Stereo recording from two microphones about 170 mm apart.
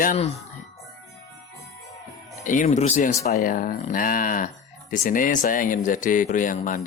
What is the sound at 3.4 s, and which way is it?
Speech, 55° left (ahead or behind).